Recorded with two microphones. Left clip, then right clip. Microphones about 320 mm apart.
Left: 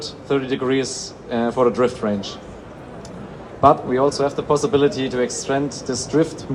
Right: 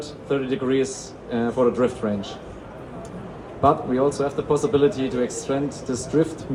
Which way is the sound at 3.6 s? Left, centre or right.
Left.